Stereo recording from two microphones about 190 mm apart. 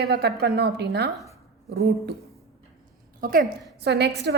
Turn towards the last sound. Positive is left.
turn(degrees=-60)  # may be behind; listen again after turning